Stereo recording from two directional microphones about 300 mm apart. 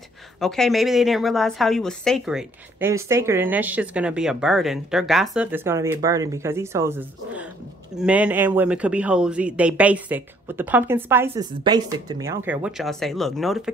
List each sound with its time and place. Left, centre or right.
0.4 s a woman's voice: centre